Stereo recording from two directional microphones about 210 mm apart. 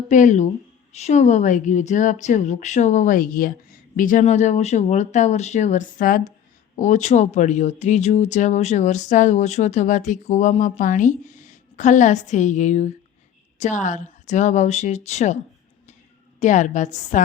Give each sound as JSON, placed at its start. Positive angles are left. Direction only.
{"t": 0.1, "sound": "speech", "side_deg": 35}
{"t": 16.4, "sound": "speech", "side_deg": 35}